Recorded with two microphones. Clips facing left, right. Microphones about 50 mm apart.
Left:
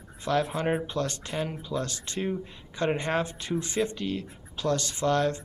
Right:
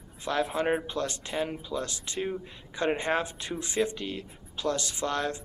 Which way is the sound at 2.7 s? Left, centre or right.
Centre.